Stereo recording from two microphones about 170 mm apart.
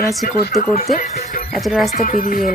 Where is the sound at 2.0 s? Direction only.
55° left (ahead or behind).